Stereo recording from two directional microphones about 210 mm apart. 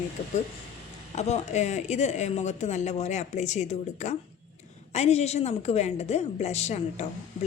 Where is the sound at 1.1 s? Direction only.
30° left (ahead or behind).